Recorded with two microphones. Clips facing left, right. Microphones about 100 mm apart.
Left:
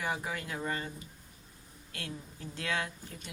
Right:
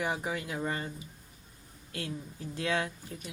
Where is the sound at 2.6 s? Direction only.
25° right (ahead or behind).